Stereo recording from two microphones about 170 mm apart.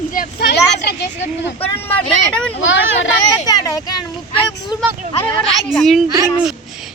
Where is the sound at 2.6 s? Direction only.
90° left.